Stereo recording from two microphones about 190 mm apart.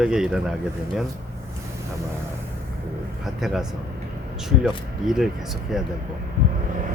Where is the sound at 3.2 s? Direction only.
Centre (ahead or behind).